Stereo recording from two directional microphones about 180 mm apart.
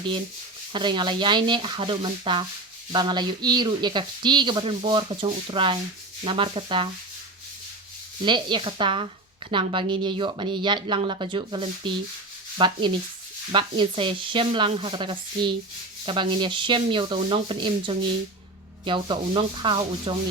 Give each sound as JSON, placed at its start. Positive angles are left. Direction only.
{"t": 0.7, "sound": "speech", "side_deg": -25}
{"t": 8.2, "sound": "speech", "side_deg": -25}